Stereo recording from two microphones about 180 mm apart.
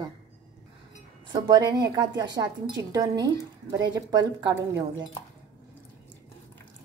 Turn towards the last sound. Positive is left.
turn(degrees=-25)  # may be behind; listen again after turning